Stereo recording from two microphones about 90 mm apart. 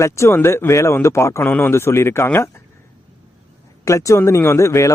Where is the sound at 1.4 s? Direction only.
20° left (ahead or behind).